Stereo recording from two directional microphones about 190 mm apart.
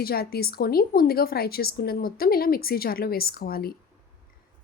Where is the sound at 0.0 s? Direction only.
55° left (ahead or behind).